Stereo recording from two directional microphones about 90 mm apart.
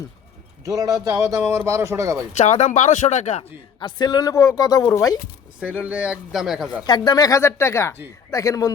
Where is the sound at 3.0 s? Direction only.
70° left (ahead or behind).